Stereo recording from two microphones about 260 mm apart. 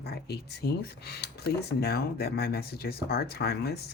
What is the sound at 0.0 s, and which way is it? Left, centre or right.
Speech, left.